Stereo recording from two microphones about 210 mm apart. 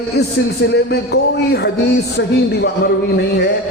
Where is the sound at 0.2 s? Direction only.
50° left (ahead or behind).